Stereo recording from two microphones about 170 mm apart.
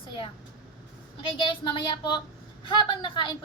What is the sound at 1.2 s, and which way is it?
A woman's voice, 30° left (ahead or behind).